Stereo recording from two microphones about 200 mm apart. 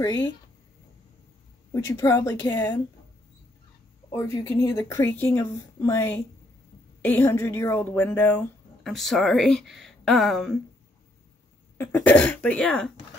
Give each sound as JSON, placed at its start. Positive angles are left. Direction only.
{"t": 0.0, "sound": "speech", "side_deg": 15}
{"t": 1.7, "sound": "speech", "side_deg": 15}
{"t": 4.1, "sound": "speech", "side_deg": 15}
{"t": 11.8, "sound": "speech", "side_deg": 10}